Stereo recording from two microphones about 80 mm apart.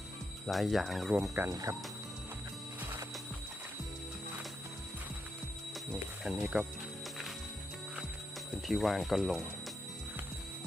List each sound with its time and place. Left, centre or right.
0.4 s speech: centre
1.5 s speech: right
5.9 s speech: centre
8.6 s speech: centre